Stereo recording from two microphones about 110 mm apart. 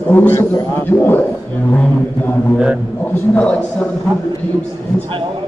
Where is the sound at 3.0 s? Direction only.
15° left (ahead or behind).